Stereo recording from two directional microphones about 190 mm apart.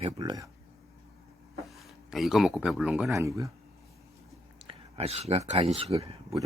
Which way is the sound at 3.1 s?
15° right (ahead or behind).